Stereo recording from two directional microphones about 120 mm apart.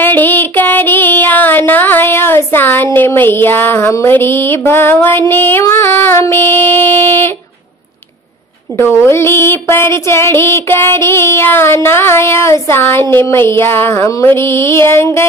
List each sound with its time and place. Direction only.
0.0 s music: 15° left (ahead or behind)
8.7 s speech: 20° left (ahead or behind)